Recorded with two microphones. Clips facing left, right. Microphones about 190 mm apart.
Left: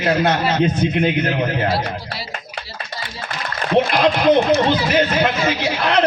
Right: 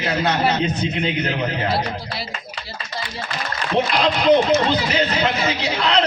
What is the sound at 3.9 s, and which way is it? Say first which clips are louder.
A man's voice: right 2 dB; 55° left (ahead or behind).